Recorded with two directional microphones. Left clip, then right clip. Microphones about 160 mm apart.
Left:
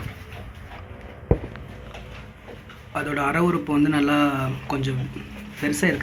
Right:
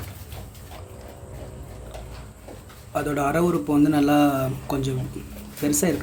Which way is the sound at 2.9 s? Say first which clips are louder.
Even; 20° right (ahead or behind).